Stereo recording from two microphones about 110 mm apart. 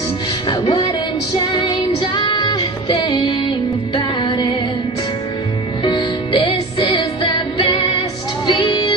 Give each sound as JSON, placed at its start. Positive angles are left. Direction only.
{"t": 0.5, "sound": "music", "side_deg": 45}
{"t": 5.9, "sound": "music", "side_deg": 45}